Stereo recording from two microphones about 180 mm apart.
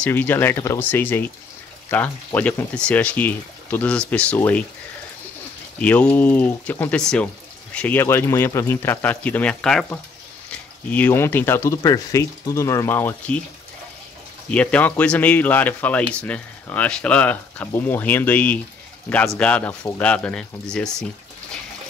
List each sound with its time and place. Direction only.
0.0 s speech: 10° left (ahead or behind)
5.8 s speech: 10° left (ahead or behind)
14.5 s speech: 5° left (ahead or behind)